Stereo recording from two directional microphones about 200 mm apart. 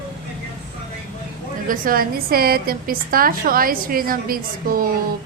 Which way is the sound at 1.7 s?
45° right (ahead or behind).